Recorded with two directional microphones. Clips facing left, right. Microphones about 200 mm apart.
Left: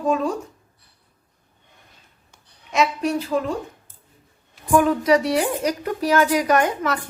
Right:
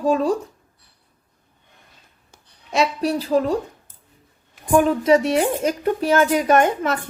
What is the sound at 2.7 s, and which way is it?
Speech, 35° right (ahead or behind).